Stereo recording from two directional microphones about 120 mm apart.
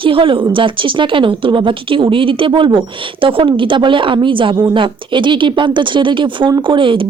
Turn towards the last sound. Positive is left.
turn(degrees=-45)  # may be behind; listen again after turning